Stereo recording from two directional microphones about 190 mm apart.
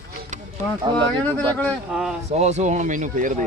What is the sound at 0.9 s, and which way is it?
Speech, 20° right (ahead or behind).